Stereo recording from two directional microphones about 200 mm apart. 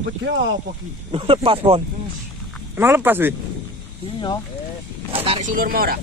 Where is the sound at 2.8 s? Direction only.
10° right (ahead or behind).